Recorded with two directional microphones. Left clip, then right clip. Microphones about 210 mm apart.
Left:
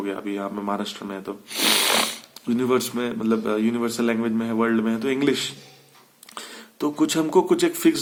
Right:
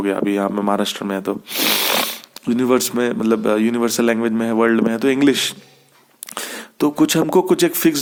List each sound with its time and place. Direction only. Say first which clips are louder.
0.0 s speech: right 9 dB; 45° right (ahead or behind)
1.5 s speech: right 1 dB; 30° right (ahead or behind)